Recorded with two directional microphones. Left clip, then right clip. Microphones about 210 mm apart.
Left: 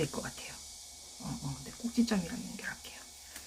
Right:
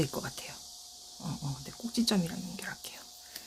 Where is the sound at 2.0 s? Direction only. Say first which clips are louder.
Right 4 dB; 45° right (ahead or behind).